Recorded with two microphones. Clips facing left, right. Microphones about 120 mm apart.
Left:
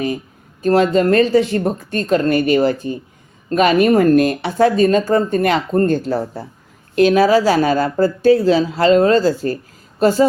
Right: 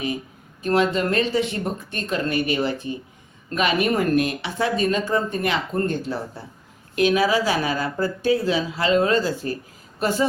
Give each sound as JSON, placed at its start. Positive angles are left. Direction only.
{"t": 0.6, "sound": "speech", "side_deg": 40}